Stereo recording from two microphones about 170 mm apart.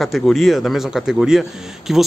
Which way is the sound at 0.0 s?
Centre (ahead or behind).